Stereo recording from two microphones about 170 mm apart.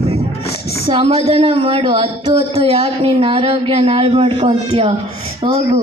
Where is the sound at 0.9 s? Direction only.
30° right (ahead or behind).